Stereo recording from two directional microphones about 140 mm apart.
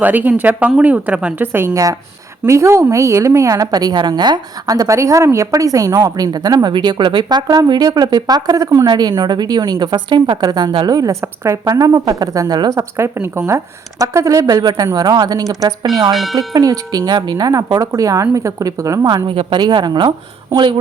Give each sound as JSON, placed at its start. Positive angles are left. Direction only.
{"t": 0.0, "sound": "a woman's voice", "side_deg": -15}